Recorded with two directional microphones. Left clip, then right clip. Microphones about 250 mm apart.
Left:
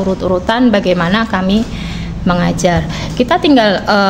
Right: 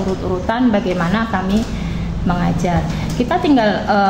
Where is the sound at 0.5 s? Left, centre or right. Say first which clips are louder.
Left 4 dB; left.